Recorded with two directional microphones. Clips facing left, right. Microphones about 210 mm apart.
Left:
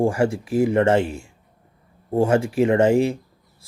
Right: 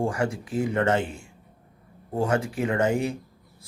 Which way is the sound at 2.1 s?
25° left (ahead or behind).